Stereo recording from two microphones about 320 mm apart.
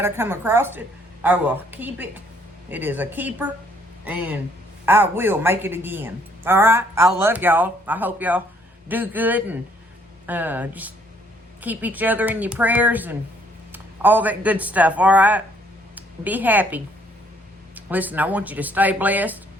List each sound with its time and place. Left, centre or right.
0.0 s a man's voice: centre